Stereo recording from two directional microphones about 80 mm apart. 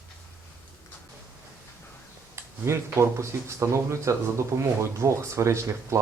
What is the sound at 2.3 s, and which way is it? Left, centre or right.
Speech, right.